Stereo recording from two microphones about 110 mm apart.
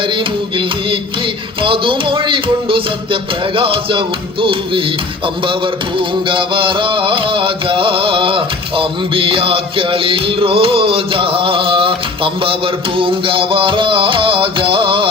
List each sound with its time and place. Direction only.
0.0 s music: 50° right (ahead or behind)